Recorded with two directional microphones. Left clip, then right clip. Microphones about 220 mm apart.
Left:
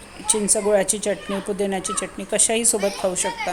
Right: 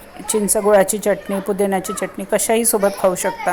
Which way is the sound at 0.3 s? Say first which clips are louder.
Right 5 dB; 15° right (ahead or behind).